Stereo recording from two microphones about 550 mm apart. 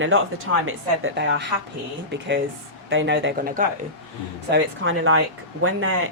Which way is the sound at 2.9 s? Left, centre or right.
Centre.